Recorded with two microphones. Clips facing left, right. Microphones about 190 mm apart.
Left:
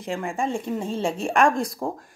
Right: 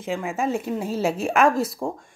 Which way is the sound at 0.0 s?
Centre (ahead or behind).